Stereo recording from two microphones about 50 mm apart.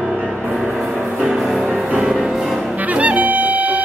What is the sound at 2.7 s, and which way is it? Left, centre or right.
Music, right.